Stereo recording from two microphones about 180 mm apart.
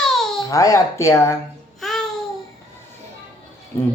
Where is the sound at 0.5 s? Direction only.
20° left (ahead or behind).